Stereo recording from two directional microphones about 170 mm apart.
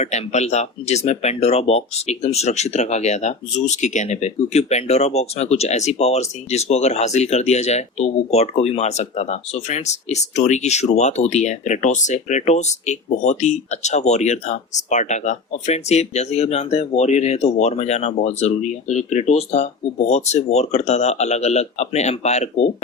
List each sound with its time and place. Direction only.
0.0 s speech: 40° left (ahead or behind)